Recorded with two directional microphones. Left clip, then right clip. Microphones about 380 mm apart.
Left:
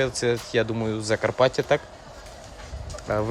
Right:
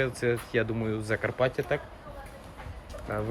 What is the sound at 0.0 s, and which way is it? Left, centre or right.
Speech, centre.